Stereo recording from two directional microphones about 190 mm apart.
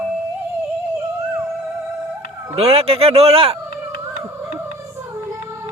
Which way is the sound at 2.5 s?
35° right (ahead or behind).